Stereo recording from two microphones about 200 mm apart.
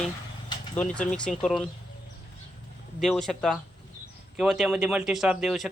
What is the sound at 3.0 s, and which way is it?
Speech, centre (ahead or behind).